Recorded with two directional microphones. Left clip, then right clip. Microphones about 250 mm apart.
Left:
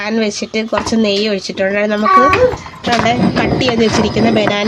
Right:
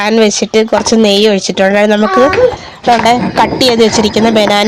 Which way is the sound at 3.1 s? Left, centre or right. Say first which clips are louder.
Right 5 dB; right.